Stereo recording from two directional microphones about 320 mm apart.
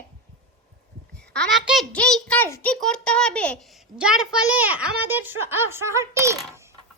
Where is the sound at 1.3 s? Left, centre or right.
Centre.